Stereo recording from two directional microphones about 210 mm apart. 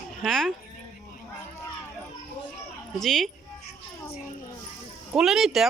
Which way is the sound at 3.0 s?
Centre (ahead or behind).